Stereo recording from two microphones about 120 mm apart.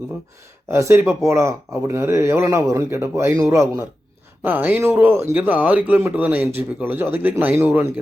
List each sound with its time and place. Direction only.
0.7 s a man's voice: 20° right (ahead or behind)